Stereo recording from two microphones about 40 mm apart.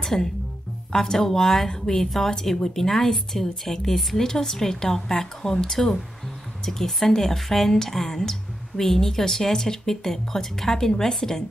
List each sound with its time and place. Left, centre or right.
0.0 s speech: centre